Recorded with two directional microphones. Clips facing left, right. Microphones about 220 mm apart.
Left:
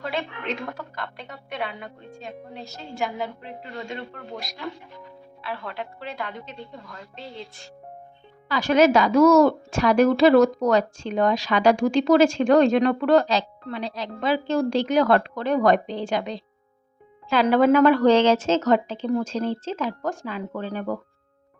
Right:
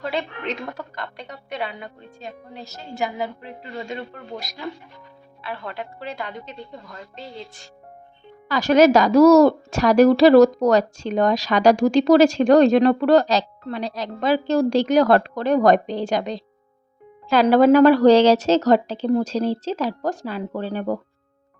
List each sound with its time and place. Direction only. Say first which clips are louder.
0.0 s speech: right 3 dB; centre (ahead or behind)
8.4 s a woman's voice: right 3 dB; 40° right (ahead or behind)